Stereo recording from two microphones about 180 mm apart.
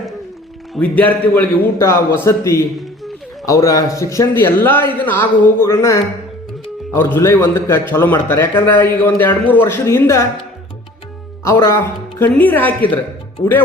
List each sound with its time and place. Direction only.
0.7 s a man's voice: 10° left (ahead or behind)
11.4 s a man's voice: 15° left (ahead or behind)